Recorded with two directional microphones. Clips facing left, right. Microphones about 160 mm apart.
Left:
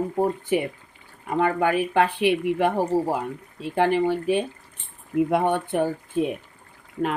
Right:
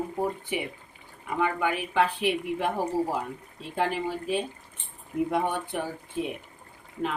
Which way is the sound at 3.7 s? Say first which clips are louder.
Left 8 dB; 70° left (ahead or behind).